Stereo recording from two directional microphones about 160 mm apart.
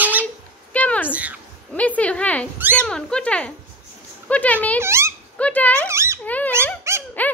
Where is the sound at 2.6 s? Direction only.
10° right (ahead or behind).